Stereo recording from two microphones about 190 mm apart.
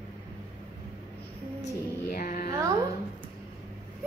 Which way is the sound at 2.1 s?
50° left (ahead or behind).